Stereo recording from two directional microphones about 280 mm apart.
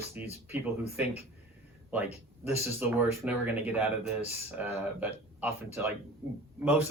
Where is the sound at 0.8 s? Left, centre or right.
Left.